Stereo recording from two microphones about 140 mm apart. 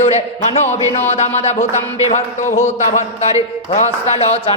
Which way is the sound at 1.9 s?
60° left (ahead or behind).